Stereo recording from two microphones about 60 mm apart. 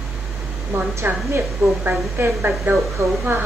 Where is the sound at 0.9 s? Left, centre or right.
Right.